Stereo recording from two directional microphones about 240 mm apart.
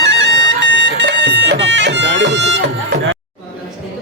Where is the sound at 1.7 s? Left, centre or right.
Right.